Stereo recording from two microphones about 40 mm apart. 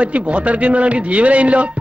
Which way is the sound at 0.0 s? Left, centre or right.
Right.